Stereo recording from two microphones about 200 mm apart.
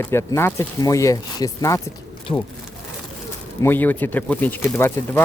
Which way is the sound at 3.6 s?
10° left (ahead or behind).